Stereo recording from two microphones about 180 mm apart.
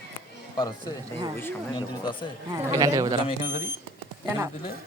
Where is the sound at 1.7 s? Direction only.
25° left (ahead or behind).